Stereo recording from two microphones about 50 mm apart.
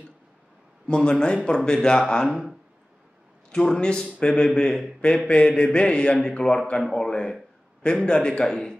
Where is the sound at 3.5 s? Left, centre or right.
Centre.